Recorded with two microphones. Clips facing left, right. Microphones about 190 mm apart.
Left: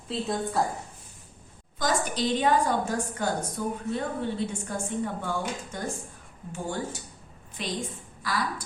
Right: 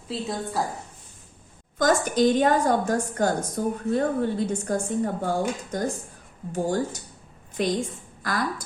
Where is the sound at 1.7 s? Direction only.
50° right (ahead or behind).